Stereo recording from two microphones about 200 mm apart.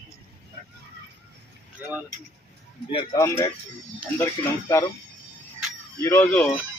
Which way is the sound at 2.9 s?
15° left (ahead or behind).